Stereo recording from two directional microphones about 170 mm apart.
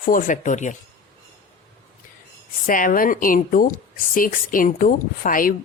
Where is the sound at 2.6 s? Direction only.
55° left (ahead or behind).